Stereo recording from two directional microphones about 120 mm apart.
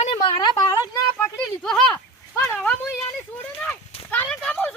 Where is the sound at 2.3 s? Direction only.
25° left (ahead or behind).